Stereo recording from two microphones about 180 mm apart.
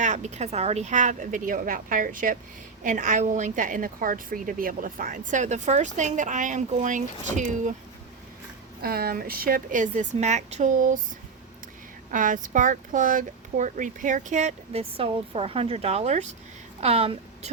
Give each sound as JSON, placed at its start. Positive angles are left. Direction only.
{"t": 0.0, "sound": "a woman's voice", "side_deg": -40}
{"t": 8.8, "sound": "a woman's voice", "side_deg": -60}
{"t": 12.1, "sound": "a woman's voice", "side_deg": -45}